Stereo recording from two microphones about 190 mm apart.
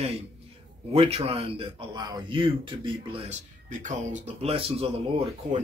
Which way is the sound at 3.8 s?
40° right (ahead or behind).